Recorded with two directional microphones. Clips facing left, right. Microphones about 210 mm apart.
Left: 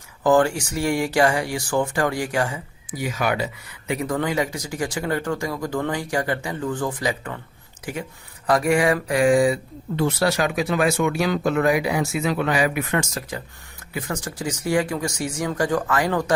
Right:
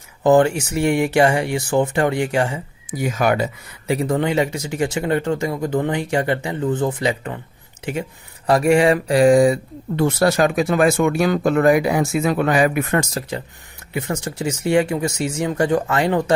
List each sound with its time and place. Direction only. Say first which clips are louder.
0.2 s speech: right 4 dB; 20° right (ahead or behind)
3.0 s speech: right 5 dB; 45° right (ahead or behind)
3.8 s speech: right 4 dB; 30° right (ahead or behind); by 13.1 s 45° right (ahead or behind)
13.9 s speech: right 4 dB; 25° right (ahead or behind)